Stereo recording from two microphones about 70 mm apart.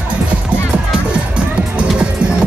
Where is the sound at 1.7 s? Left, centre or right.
Centre.